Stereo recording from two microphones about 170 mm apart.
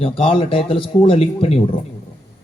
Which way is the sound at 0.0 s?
30° left (ahead or behind).